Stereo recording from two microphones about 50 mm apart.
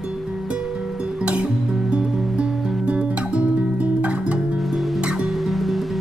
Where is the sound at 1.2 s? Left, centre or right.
Right.